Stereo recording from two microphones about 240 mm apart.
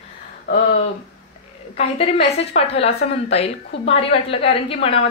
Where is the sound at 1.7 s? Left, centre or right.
Left.